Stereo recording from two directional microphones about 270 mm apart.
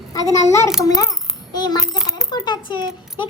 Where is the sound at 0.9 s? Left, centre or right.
Centre.